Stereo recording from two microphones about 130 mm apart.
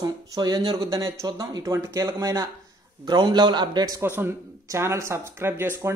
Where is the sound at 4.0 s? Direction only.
15° right (ahead or behind).